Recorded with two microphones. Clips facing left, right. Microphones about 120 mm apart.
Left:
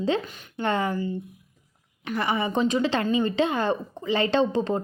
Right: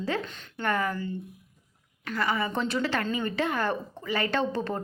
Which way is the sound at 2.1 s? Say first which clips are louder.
Left 3 dB; 20° left (ahead or behind).